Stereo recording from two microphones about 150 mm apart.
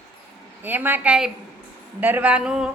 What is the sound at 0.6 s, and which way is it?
A woman's voice, 15° right (ahead or behind).